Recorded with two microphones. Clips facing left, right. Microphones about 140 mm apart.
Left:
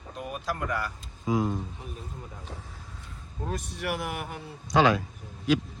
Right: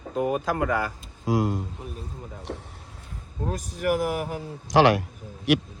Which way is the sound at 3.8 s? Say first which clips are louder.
Right 10 dB; 40° right (ahead or behind).